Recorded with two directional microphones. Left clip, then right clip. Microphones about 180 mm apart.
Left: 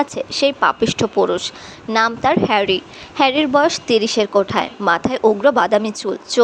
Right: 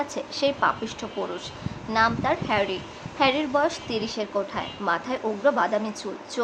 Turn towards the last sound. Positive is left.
turn(degrees=40)  # may be behind; listen again after turning